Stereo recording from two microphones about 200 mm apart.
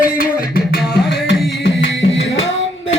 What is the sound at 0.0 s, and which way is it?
Music, 45° left (ahead or behind).